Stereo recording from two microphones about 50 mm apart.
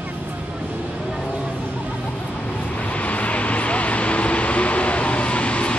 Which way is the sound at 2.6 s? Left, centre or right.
Left.